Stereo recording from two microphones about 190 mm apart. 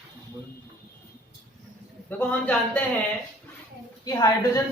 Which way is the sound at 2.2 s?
5° left (ahead or behind).